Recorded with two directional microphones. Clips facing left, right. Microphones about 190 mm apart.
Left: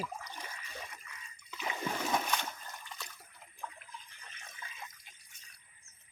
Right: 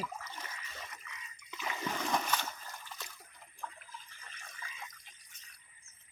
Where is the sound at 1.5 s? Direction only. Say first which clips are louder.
Left 1 dB; 20° left (ahead or behind).